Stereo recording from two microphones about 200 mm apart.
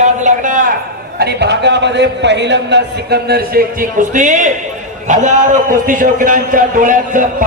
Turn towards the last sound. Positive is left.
turn(degrees=-45)  # may be behind; listen again after turning